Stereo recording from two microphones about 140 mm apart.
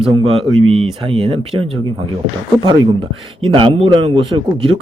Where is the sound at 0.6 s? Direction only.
40° right (ahead or behind).